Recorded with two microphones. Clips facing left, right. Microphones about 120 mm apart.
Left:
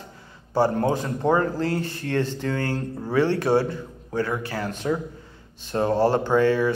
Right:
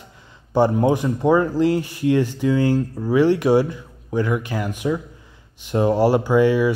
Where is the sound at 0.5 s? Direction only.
15° right (ahead or behind).